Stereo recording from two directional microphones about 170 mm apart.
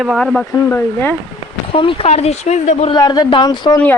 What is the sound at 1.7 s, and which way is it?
Speech, 30° left (ahead or behind).